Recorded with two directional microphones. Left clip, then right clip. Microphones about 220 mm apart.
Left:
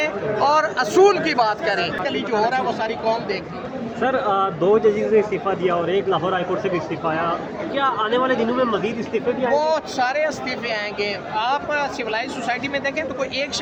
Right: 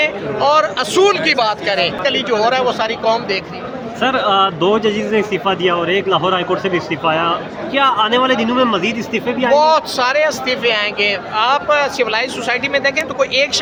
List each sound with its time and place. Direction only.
0.0 s a man's voice: 5° right (ahead or behind)
4.0 s a man's voice: 45° right (ahead or behind)
9.5 s speech: 10° right (ahead or behind)